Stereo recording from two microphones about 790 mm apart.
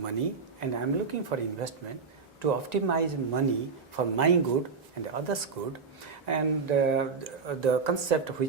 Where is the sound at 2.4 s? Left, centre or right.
Right.